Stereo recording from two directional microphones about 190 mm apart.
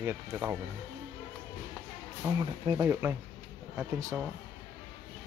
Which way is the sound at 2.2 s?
15° right (ahead or behind).